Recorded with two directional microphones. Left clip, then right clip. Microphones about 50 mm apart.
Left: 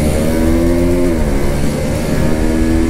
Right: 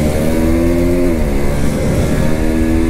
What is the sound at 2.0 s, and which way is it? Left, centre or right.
Vehicle, centre.